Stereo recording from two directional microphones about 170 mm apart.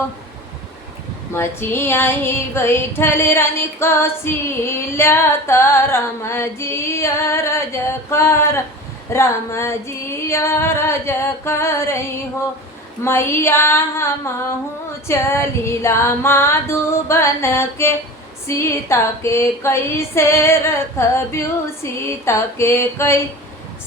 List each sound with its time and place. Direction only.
1.3 s female singing: 15° left (ahead or behind)
13.1 s female singing: 15° left (ahead or behind)